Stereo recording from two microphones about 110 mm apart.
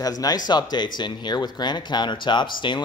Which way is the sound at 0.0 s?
35° left (ahead or behind).